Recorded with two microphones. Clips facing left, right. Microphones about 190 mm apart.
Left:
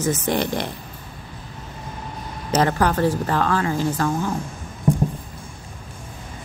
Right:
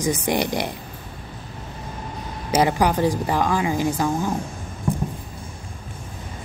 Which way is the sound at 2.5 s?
10° right (ahead or behind).